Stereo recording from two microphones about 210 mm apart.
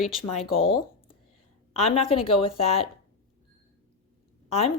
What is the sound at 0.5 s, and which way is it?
A woman's voice, 25° left (ahead or behind).